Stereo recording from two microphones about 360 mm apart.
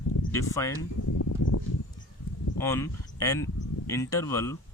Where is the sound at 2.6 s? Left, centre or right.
Centre.